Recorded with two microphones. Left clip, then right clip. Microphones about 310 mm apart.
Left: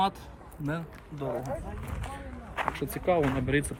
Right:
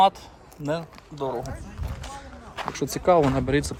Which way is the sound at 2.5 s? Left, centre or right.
Centre.